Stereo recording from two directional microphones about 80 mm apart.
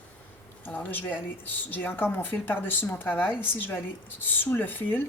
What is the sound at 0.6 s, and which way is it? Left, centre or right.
Speech, left.